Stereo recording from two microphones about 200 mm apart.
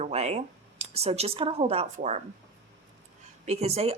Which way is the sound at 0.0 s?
35° right (ahead or behind).